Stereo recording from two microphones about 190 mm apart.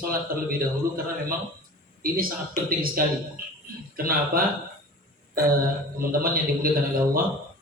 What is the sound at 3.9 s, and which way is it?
Speech, 50° right (ahead or behind).